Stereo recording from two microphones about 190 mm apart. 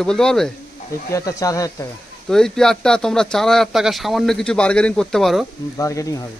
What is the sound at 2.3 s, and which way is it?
Speech, 5° left (ahead or behind).